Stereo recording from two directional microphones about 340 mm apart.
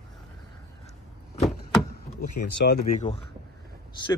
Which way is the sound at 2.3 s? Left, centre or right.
Left.